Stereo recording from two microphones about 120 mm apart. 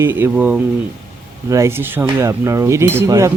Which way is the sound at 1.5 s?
25° right (ahead or behind).